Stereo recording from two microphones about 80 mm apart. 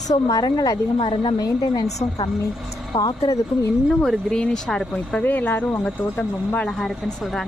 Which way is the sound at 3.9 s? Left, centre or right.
Centre.